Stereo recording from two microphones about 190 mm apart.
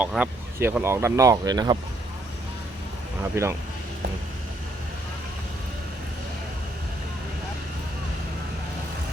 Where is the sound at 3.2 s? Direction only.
15° right (ahead or behind).